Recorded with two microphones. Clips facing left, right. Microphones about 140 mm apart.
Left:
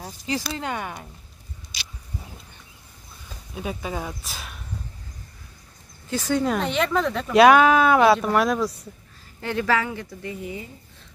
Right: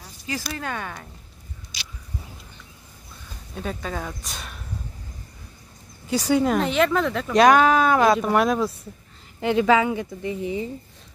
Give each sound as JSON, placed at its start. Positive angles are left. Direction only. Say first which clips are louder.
{"t": 0.3, "sound": "speech", "louder": "left 2 dB", "side_deg": 20}
{"t": 3.5, "sound": "speech", "louder": "even", "side_deg": 10}
{"t": 6.0, "sound": "speech", "louder": "right 3 dB", "side_deg": -10}
{"t": 8.5, "sound": "speech", "louder": "right 1 dB", "side_deg": -25}